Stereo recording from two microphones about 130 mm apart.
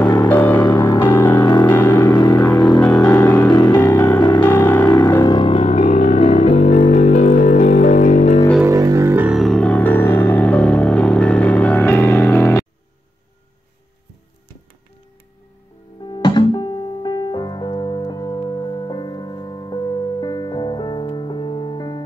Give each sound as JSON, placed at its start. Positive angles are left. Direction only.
{"t": 0.3, "sound": "music", "side_deg": 15}
{"t": 2.0, "sound": "music", "side_deg": 30}
{"t": 2.4, "sound": "music", "side_deg": 10}
{"t": 3.4, "sound": "vehicle", "side_deg": 35}
{"t": 3.7, "sound": "music", "side_deg": 15}
{"t": 4.2, "sound": "music", "side_deg": 35}
{"t": 4.5, "sound": "music", "side_deg": 15}
{"t": 5.1, "sound": "music", "side_deg": 30}
{"t": 8.6, "sound": "music", "side_deg": -25}
{"t": 9.2, "sound": "music", "side_deg": 0}
{"t": 16.1, "sound": "keyboard", "side_deg": 35}